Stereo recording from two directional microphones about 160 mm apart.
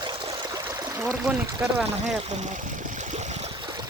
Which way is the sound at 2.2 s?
45° right (ahead or behind).